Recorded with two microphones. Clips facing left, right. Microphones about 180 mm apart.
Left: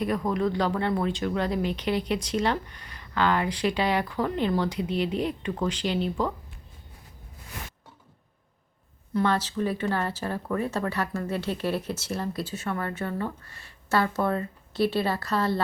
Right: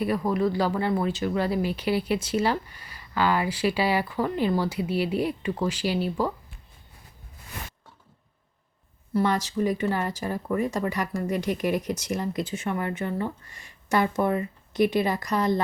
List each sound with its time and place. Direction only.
0.0 s speech: 5° right (ahead or behind)
9.1 s speech: 10° right (ahead or behind)